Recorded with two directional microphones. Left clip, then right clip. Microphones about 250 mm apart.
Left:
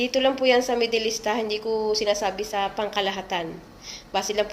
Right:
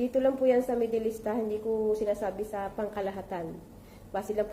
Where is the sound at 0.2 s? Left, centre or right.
Left.